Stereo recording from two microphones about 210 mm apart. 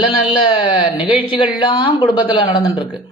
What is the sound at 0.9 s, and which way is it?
Speech, 5° right (ahead or behind).